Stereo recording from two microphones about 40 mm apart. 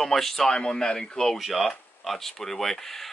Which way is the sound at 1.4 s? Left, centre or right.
Centre.